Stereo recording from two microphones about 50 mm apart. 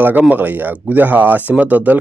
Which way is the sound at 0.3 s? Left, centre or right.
Right.